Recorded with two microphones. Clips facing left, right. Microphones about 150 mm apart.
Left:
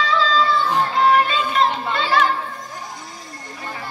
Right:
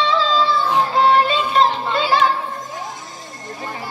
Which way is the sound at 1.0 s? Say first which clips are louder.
Right 1 dB; 30° right (ahead or behind).